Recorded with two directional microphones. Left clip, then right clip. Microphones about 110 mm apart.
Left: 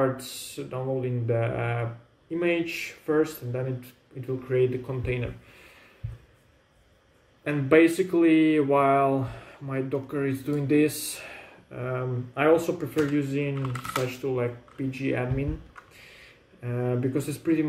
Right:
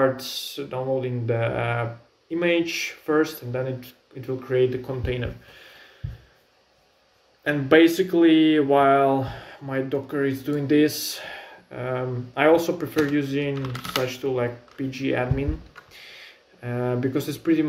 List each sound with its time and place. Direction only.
0.0 s speech: 15° left (ahead or behind)
7.4 s speech: 20° left (ahead or behind)
16.6 s speech: 15° left (ahead or behind)